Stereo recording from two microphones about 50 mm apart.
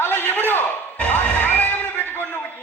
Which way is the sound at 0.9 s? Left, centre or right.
Left.